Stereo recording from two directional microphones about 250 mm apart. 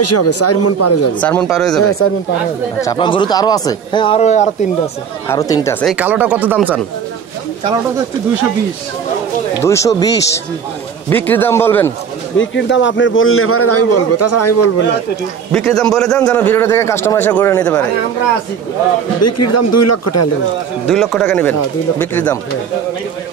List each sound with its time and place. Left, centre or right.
0.0 s speech: left
1.2 s a man's voice: centre
1.8 s a man's voice: left
2.8 s speech: centre
5.3 s speech: centre
5.9 s speech: centre
9.6 s speech: centre
12.4 s a man's voice: left
15.5 s a man's voice: centre
19.2 s speech: left
20.9 s a man's voice: centre